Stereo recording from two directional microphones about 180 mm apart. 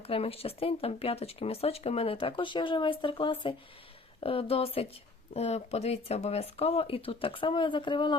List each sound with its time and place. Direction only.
0.0 s speech: 35° left (ahead or behind)